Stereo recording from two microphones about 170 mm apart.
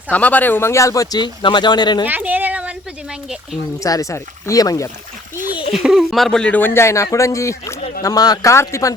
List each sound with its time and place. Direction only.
0.1 s speech: 10° left (ahead or behind); by 2.0 s 25° left (ahead or behind)
2.0 s speech: 10° right (ahead or behind)
3.8 s speech: 20° left (ahead or behind)
5.7 s speech: 5° right (ahead or behind); by 9.0 s 15° left (ahead or behind)